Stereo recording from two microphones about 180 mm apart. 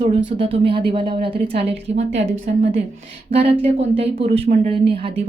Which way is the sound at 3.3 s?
30° right (ahead or behind).